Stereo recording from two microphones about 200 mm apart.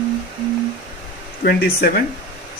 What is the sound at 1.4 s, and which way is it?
Speech, 50° left (ahead or behind).